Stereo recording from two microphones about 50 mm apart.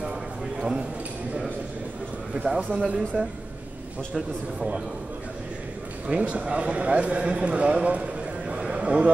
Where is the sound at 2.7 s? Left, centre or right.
Centre.